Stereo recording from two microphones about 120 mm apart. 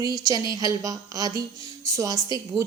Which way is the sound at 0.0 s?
30° right (ahead or behind).